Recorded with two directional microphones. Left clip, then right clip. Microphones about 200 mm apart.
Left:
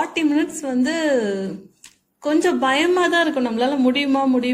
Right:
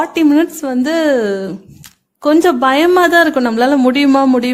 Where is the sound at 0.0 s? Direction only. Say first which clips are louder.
Right 8 dB; 40° right (ahead or behind).